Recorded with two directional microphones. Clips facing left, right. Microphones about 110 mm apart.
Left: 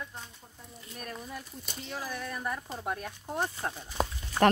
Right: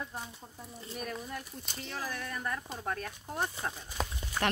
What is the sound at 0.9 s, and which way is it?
Speech, centre (ahead or behind).